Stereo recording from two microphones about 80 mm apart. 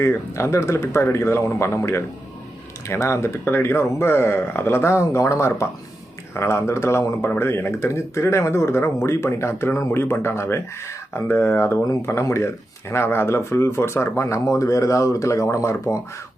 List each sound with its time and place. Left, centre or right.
0.0 s speech: left